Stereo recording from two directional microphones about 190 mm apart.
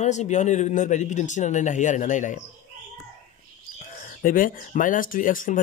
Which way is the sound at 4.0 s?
45° left (ahead or behind).